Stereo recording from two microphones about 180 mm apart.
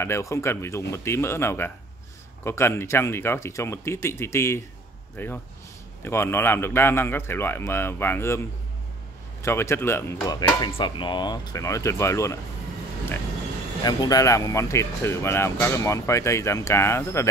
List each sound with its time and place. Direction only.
0.0 s speech: 15° left (ahead or behind)
9.4 s speech: 15° left (ahead or behind)
13.8 s speech: 20° left (ahead or behind)